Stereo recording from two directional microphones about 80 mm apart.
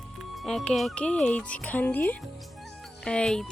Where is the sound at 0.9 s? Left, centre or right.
Centre.